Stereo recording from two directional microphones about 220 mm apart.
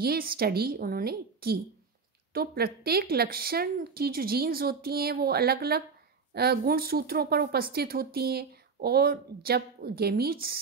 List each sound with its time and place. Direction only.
0.0 s speech: 45° right (ahead or behind)